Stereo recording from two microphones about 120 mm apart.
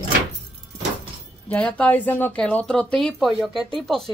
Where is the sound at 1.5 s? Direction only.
10° left (ahead or behind).